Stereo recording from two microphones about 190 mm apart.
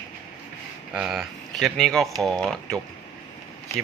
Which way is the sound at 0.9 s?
5° right (ahead or behind).